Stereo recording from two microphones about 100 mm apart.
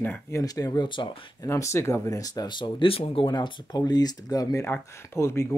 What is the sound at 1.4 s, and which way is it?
Speech, 30° left (ahead or behind).